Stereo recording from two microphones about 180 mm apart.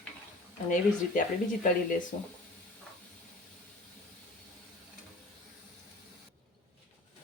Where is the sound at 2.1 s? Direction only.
45° left (ahead or behind).